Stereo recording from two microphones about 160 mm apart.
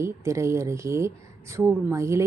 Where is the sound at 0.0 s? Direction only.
20° right (ahead or behind).